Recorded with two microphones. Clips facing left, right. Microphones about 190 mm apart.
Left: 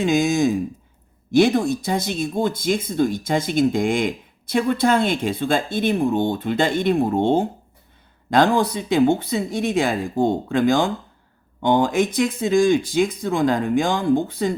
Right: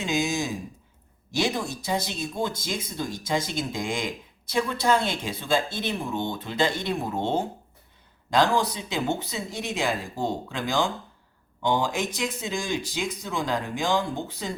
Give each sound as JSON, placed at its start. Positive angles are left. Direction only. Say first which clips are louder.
{"t": 0.0, "sound": "speech", "louder": "left 9 dB", "side_deg": 50}